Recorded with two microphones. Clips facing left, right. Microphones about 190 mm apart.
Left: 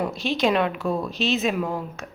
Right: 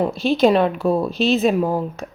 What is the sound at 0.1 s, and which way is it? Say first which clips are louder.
Speech: right 7 dB; centre (ahead or behind).